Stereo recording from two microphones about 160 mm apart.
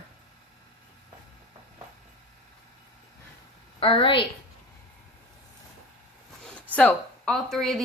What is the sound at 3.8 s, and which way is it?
Speech, 35° left (ahead or behind).